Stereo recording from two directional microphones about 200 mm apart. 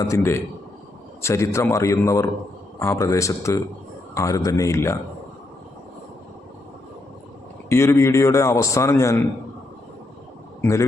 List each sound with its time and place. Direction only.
0.0 s a man's voice: 15° left (ahead or behind)
7.7 s a man's voice: 15° left (ahead or behind)
10.6 s a man's voice: 15° left (ahead or behind)